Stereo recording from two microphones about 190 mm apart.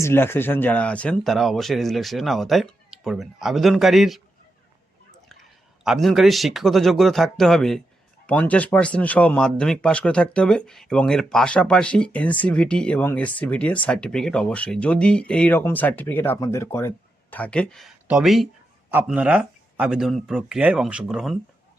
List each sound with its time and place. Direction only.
0.0 s speech: 15° left (ahead or behind)
5.8 s speech: centre (ahead or behind)